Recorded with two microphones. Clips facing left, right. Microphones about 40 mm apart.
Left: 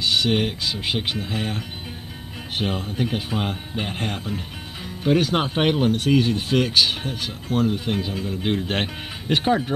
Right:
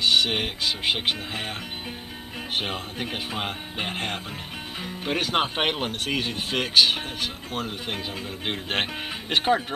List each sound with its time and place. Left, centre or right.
0.0 s speech: centre
2.6 s speech: centre